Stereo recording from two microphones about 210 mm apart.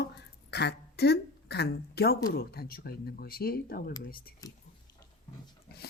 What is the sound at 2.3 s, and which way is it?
Speech, 45° left (ahead or behind).